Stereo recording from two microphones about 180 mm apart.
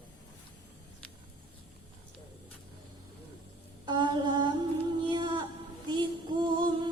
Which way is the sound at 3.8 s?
25° right (ahead or behind).